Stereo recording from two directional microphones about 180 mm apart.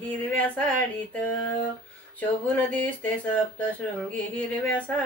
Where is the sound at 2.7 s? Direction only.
10° left (ahead or behind).